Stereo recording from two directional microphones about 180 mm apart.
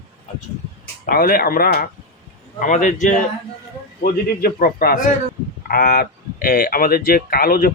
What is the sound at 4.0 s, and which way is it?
Speech, 55° left (ahead or behind).